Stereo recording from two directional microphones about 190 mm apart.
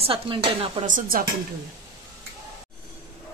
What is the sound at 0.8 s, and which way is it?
Speech, 45° right (ahead or behind).